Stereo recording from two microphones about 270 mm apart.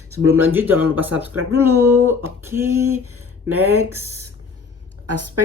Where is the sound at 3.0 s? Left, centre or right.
Right.